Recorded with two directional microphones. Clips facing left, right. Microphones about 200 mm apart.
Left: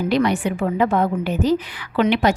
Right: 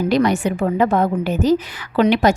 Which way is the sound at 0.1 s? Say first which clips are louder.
Right 1 dB; 45° right (ahead or behind).